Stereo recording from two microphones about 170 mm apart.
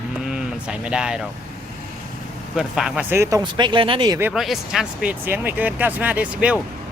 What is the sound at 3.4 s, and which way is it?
Speech, 25° right (ahead or behind).